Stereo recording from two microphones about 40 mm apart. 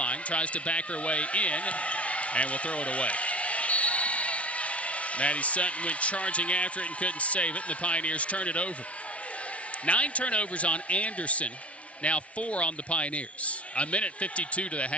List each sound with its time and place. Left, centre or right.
0.0 s speech: left
9.8 s a man's voice: left